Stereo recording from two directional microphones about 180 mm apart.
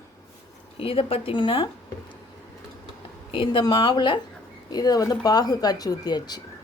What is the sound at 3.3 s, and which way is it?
Speech, 25° left (ahead or behind).